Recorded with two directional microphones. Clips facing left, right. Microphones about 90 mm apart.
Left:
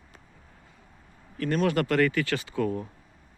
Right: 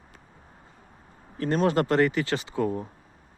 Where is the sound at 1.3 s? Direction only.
30° right (ahead or behind).